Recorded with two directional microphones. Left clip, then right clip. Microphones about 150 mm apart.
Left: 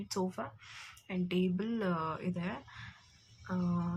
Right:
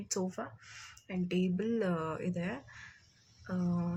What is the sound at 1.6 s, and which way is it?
Speech, 15° right (ahead or behind).